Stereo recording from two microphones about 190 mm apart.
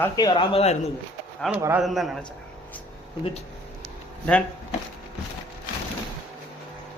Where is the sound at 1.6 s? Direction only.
15° right (ahead or behind).